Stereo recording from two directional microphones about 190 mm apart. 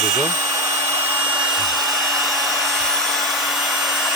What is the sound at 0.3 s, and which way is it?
Hair dryer, 15° right (ahead or behind).